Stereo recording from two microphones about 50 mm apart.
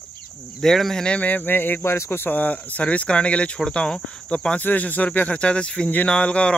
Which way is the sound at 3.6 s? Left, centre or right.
Centre.